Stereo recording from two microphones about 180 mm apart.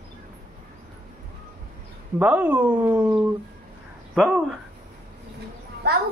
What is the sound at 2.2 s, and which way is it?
Speech, 10° right (ahead or behind).